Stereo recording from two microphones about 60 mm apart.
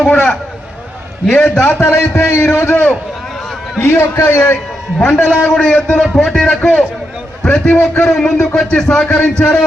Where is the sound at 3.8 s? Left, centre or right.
Left.